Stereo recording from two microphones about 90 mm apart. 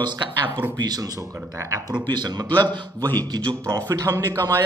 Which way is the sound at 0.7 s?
45° right (ahead or behind).